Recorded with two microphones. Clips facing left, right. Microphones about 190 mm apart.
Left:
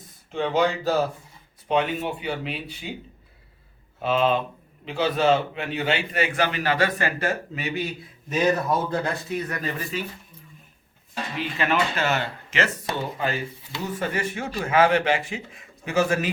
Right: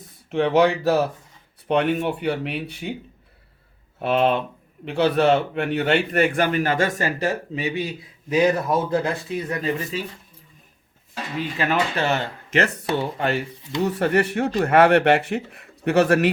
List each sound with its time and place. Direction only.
0.3 s a man's voice: 70° right (ahead or behind)
4.0 s a man's voice: 65° right (ahead or behind); by 7.7 s 35° right (ahead or behind)
7.9 s a man's voice: 15° right (ahead or behind)
9.0 s speech: 25° right (ahead or behind)
11.5 s speech: 40° right (ahead or behind)
12.9 s speech: 70° right (ahead or behind)